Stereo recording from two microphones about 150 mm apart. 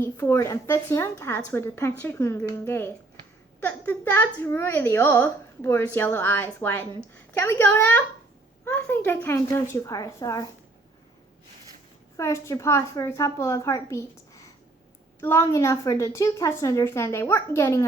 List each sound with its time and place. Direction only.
0.0 s a woman's voice: 15° left (ahead or behind)
12.1 s a woman's voice: 20° left (ahead or behind)